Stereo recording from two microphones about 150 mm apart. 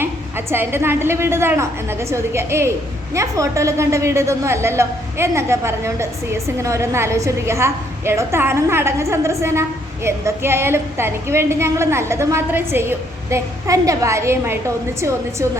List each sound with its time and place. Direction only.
0.0 s a woman's voice: 15° right (ahead or behind)